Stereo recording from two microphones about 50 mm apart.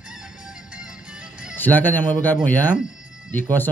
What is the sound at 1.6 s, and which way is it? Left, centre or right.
Speech, left.